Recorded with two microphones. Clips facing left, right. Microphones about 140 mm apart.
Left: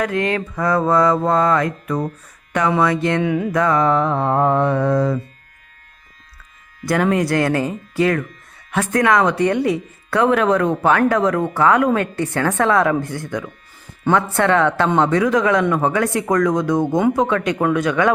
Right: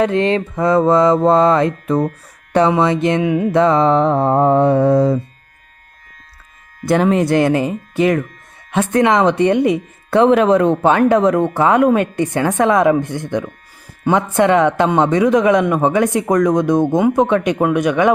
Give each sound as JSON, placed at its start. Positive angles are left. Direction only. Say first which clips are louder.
{"t": 0.0, "sound": "speech", "louder": "right 5 dB", "side_deg": -25}
{"t": 6.8, "sound": "speech", "louder": "right 4 dB", "side_deg": -25}